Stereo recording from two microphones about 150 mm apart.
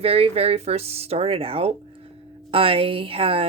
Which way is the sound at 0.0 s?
40° right (ahead or behind).